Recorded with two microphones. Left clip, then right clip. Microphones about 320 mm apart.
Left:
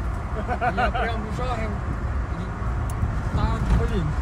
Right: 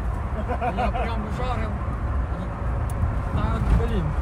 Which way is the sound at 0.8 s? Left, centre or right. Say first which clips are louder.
Left 2 dB; left.